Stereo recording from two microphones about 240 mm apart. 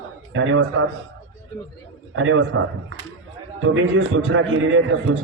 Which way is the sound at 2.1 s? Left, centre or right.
Right.